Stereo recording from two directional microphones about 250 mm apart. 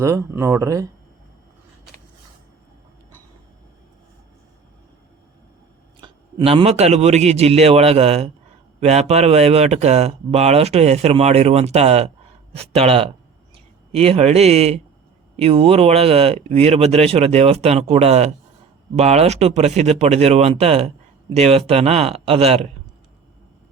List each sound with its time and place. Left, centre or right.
0.0 s speech: centre
6.0 s speech: right